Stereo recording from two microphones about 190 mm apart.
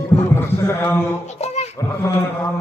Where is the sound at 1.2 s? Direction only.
35° left (ahead or behind).